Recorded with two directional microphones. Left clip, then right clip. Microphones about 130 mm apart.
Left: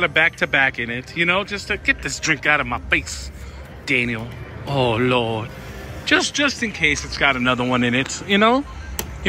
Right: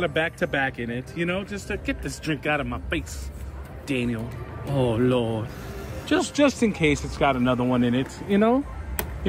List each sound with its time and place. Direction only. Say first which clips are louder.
0.0 s a man's voice: left 7 dB; 5° right (ahead or behind)
6.0 s a man's voice: left 7 dB; 25° right (ahead or behind)
6.3 s speech: left 1 dB; 35° right (ahead or behind); by 7.8 s 10° right (ahead or behind)
7.8 s speech: left 5 dB; 90° right